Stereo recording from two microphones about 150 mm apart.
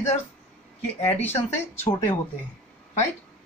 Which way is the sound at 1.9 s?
25° left (ahead or behind).